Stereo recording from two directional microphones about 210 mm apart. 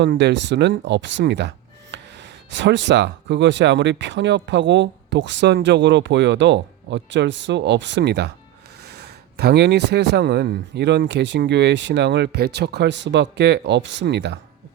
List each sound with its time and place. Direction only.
0.0 s speech: 55° right (ahead or behind)